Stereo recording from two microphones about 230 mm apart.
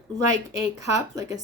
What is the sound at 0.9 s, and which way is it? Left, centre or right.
Speech, centre.